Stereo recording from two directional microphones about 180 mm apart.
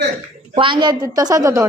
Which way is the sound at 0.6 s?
25° right (ahead or behind).